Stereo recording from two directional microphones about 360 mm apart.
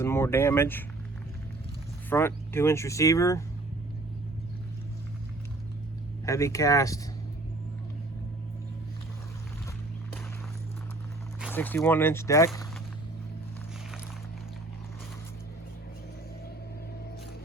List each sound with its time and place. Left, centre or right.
0.0 s speech: centre
2.0 s speech: centre
6.2 s speech: centre
11.3 s speech: centre